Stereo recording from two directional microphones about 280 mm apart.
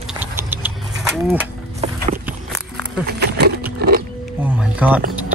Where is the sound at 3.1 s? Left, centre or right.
Right.